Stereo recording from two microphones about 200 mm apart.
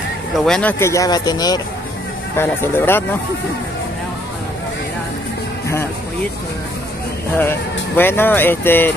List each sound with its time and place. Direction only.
0.5 s speech: 5° left (ahead or behind)
7.3 s speech: 10° left (ahead or behind)